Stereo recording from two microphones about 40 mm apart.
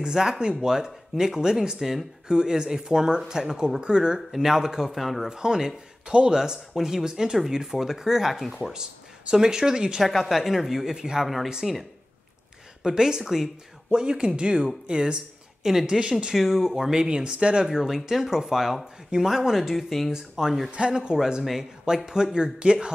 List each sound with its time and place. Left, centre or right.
0.0 s speech: centre
4.3 s speech: centre
4.9 s speech: centre
5.3 s speech: centre
9.3 s speech: centre
10.0 s speech: centre
11.6 s speech: centre
12.8 s speech: centre
13.9 s speech: right
15.6 s speech: centre
16.0 s speech: right
17.8 s speech: centre
19.7 s speech: centre
20.1 s speech: centre